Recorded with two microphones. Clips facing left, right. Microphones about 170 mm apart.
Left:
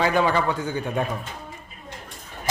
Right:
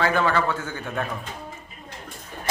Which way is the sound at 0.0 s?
15° left (ahead or behind).